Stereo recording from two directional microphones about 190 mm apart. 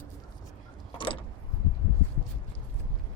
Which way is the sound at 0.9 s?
25° left (ahead or behind).